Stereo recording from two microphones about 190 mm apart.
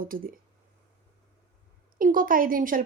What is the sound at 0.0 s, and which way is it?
Speech, 50° right (ahead or behind).